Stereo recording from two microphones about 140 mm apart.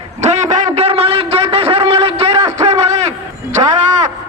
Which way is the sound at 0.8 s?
45° right (ahead or behind).